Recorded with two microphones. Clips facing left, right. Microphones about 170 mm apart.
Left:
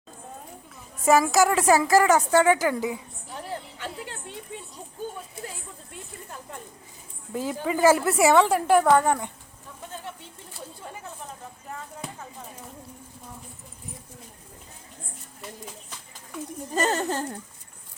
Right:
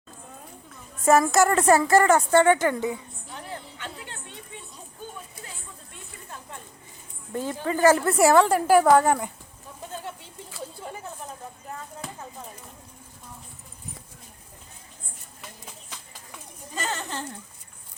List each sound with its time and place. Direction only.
1.0 s a woman's voice: centre (ahead or behind)
3.3 s music: 40° left (ahead or behind)
7.3 s a woman's voice: 10° left (ahead or behind)
16.7 s speech: 40° left (ahead or behind)